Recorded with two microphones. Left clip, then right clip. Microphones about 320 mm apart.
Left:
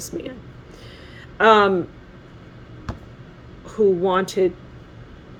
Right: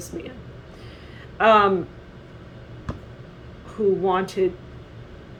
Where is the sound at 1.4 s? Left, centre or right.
Left.